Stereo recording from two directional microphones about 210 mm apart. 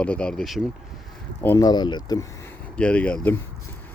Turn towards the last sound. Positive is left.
turn(degrees=10)  # may be behind; listen again after turning